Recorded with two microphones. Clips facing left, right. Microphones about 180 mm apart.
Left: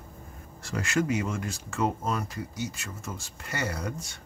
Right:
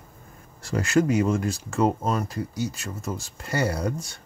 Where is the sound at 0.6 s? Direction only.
35° right (ahead or behind).